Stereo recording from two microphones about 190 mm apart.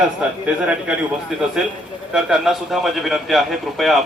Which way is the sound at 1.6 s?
5° right (ahead or behind).